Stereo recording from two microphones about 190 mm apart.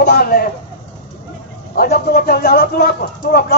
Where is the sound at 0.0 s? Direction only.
55° left (ahead or behind).